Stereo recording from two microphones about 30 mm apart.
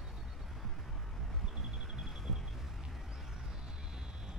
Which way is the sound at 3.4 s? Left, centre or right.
Right.